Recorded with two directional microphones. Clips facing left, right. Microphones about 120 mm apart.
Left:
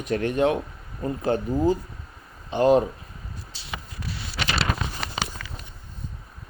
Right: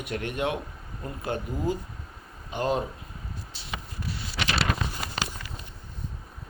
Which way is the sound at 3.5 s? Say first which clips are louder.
Left 1 dB; 90° left.